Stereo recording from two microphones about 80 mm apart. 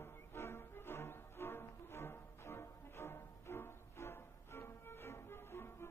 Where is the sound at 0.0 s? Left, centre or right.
Left.